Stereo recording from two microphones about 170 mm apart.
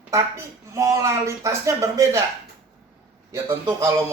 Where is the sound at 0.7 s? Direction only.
20° right (ahead or behind).